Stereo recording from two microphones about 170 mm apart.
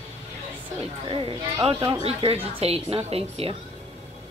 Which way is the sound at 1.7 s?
30° right (ahead or behind).